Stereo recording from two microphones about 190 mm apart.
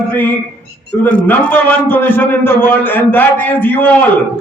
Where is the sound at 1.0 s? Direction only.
10° left (ahead or behind).